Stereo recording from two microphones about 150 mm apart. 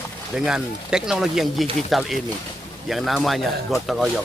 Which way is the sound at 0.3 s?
5° right (ahead or behind).